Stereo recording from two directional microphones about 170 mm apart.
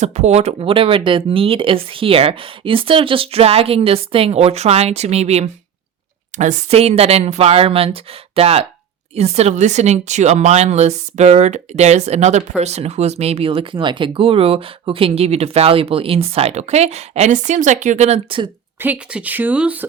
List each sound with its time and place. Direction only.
0.0 s speech: 40° right (ahead or behind)
18.8 s speech: 10° right (ahead or behind)